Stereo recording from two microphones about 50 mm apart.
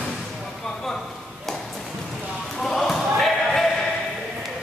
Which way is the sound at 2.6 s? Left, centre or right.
Centre.